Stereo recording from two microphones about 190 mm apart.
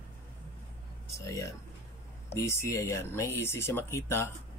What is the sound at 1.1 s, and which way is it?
Speech, 15° left (ahead or behind).